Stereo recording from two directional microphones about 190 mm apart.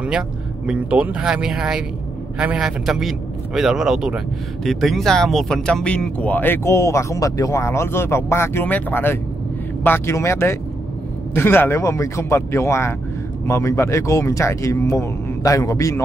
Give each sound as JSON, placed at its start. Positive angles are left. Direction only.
{"t": 0.7, "sound": "a man's voice", "side_deg": -5}